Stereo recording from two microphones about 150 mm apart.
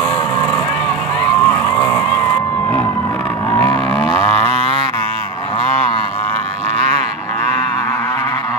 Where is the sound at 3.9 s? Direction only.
40° right (ahead or behind).